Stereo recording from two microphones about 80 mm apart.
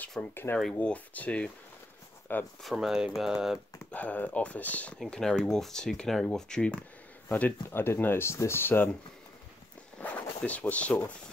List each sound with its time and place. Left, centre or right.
0.3 s speech: left
2.6 s speech: centre
3.9 s speech: centre
4.9 s speech: centre
7.2 s speech: left
9.9 s speech: centre